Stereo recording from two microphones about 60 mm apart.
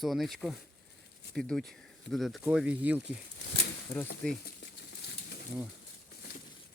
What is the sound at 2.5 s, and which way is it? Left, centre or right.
Speech, right.